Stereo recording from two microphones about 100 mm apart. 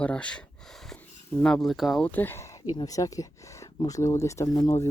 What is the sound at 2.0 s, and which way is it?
Speech, 20° left (ahead or behind).